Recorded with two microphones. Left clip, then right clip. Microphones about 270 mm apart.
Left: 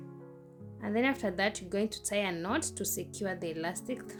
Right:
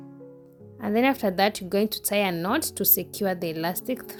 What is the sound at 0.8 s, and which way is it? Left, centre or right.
Speech, right.